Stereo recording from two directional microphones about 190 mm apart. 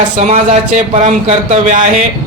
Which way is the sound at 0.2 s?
35° right (ahead or behind).